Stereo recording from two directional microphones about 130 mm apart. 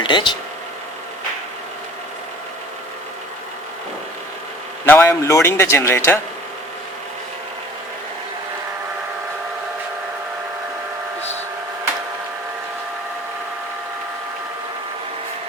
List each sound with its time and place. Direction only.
0.0 s speech: 35° left (ahead or behind)
4.9 s speech: 20° left (ahead or behind)